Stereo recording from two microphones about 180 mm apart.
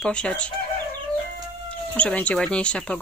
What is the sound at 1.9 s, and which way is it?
Speech, 5° left (ahead or behind).